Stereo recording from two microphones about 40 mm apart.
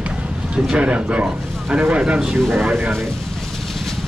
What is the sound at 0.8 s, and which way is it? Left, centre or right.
Speech, right.